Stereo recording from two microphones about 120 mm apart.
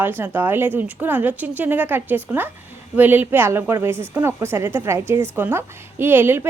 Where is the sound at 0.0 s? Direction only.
15° right (ahead or behind).